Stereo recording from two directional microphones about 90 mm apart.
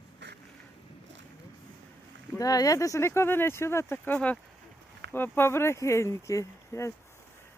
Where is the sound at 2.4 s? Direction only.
40° left (ahead or behind).